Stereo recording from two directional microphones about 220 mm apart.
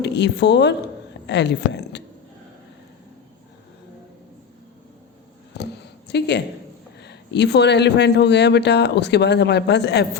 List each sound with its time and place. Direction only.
0.0 s speech: 50° left (ahead or behind)
5.5 s a sound: 50° left (ahead or behind)
6.1 s a woman's voice: 50° left (ahead or behind)